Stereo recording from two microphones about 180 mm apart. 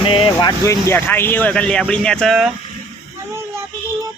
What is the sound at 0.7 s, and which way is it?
Speech, 15° left (ahead or behind).